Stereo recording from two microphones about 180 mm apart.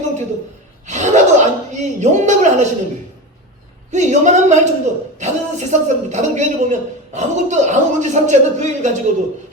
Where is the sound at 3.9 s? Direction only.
40° right (ahead or behind).